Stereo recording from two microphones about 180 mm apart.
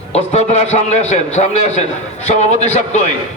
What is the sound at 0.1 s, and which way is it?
A man's voice, 35° left (ahead or behind).